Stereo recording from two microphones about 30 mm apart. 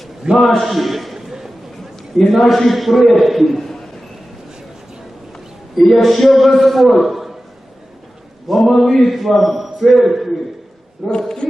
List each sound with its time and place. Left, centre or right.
0.3 s a man's voice: right
0.6 s a man's voice: centre
5.7 s a man's voice: centre
7.0 s a sound: centre
8.4 s a man's voice: centre
11.1 s speech: left